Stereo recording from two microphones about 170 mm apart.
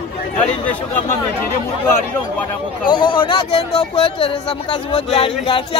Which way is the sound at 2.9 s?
25° left (ahead or behind).